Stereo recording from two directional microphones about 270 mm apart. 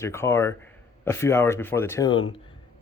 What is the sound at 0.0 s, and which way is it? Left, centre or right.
Speech, centre.